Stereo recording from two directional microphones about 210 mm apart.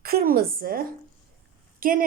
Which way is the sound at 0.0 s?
45° right (ahead or behind).